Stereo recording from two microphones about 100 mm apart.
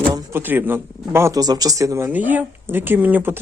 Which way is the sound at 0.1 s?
35° right (ahead or behind).